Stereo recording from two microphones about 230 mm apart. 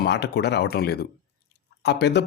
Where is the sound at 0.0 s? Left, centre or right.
Left.